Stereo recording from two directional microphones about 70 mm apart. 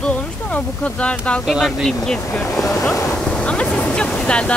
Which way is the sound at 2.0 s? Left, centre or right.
Centre.